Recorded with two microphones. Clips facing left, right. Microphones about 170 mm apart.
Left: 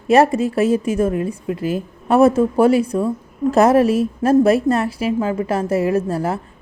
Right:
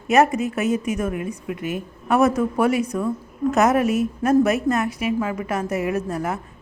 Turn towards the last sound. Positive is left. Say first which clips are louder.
# left 5 dB
turn(degrees=30)  # may be behind; listen again after turning